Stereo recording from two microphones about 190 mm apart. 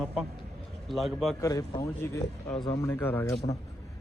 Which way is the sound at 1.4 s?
15° left (ahead or behind).